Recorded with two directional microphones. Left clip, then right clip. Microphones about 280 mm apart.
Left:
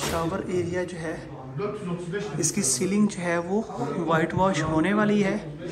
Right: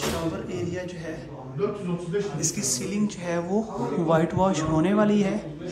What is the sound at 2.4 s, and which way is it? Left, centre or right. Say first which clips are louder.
Speech: left 2 dB; centre.